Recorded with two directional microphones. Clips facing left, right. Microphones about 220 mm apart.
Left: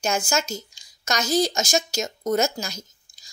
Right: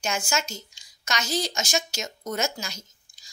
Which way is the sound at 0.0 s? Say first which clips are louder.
Left 4 dB; 40° left (ahead or behind).